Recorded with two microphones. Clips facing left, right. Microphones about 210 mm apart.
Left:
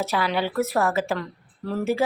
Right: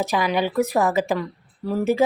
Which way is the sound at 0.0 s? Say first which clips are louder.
Right 3 dB; 15° right (ahead or behind).